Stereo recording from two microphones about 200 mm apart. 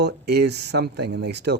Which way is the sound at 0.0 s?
55° right (ahead or behind).